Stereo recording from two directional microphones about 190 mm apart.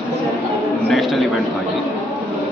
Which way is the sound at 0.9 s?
Centre (ahead or behind).